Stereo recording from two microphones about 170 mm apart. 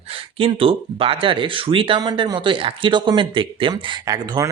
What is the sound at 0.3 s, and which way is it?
Speech, 30° right (ahead or behind).